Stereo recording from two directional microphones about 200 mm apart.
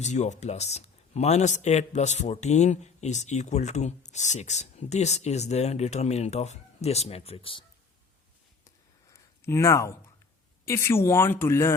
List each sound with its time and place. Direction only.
0.0 s speech: 35° left (ahead or behind)
9.4 s speech: 15° left (ahead or behind)